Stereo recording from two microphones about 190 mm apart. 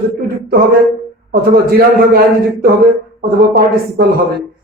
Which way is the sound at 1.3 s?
55° right (ahead or behind).